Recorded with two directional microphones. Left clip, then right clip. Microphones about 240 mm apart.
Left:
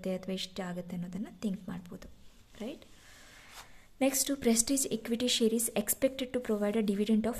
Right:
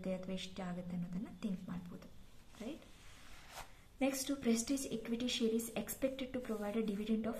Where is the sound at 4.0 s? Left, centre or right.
Left.